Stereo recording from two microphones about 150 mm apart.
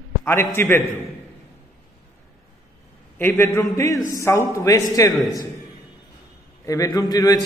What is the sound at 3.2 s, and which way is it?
A man's voice, 15° left (ahead or behind).